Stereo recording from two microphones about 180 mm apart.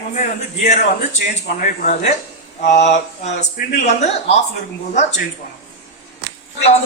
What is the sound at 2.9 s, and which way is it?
A man's voice, 40° left (ahead or behind).